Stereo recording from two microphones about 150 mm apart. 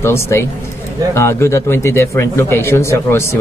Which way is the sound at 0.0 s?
15° left (ahead or behind).